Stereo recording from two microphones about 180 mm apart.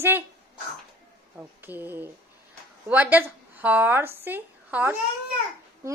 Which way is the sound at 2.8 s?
10° right (ahead or behind).